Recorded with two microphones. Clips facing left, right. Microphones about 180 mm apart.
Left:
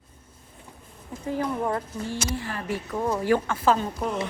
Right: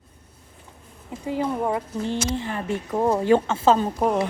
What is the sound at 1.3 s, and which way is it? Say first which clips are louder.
Speech: right 2 dB; 15° right (ahead or behind).